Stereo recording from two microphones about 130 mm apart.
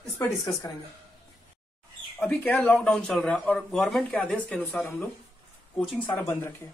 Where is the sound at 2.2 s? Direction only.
10° left (ahead or behind).